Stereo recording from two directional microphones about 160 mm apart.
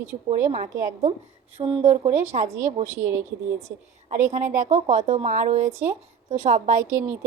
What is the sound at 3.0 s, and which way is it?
Speech, 15° right (ahead or behind).